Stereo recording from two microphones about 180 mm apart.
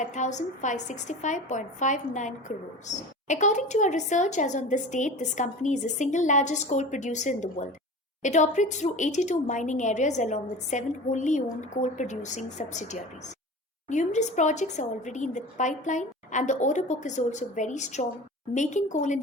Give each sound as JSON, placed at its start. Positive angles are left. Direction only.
{"t": 0.0, "sound": "a woman's voice", "side_deg": 40}